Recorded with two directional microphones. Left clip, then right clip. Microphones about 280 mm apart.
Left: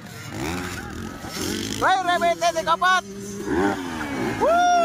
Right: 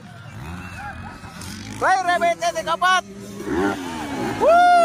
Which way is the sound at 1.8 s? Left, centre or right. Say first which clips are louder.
Right 2 dB; centre.